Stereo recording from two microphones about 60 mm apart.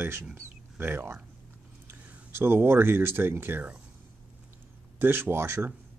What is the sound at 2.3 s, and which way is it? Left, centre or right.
Speech, right.